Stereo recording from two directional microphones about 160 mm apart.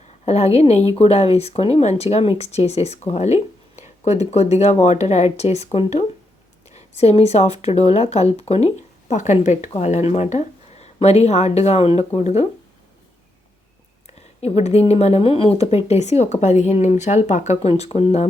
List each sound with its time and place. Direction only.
0.3 s speech: 40° left (ahead or behind)
14.1 s speech: 40° left (ahead or behind)